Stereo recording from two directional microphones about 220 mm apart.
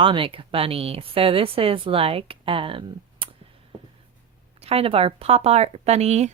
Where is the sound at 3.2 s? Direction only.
25° right (ahead or behind).